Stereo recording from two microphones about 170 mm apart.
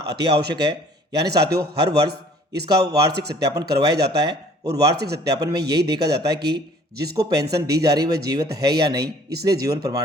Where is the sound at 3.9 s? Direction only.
70° right (ahead or behind).